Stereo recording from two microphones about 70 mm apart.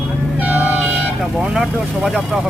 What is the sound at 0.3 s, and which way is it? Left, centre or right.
Vehicle, right.